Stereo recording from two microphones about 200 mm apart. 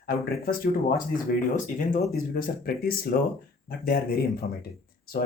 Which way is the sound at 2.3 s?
50° left (ahead or behind).